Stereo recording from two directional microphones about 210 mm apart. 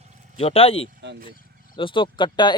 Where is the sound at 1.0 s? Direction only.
55° right (ahead or behind).